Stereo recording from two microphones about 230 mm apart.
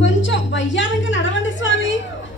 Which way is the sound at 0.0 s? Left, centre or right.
Left.